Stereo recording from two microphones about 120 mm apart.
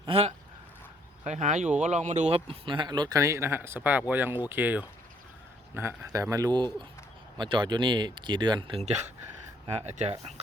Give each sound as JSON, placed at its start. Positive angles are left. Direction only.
{"t": 0.1, "sound": "speech", "side_deg": -60}
{"t": 1.2, "sound": "speech", "side_deg": -80}
{"t": 2.5, "sound": "speech", "side_deg": -45}
{"t": 9.8, "sound": "speech", "side_deg": -70}